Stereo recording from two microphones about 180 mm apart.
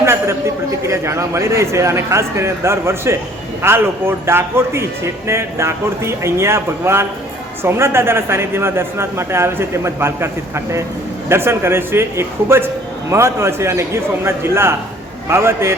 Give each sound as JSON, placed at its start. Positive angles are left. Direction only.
{"t": 0.0, "sound": "speech", "side_deg": -15}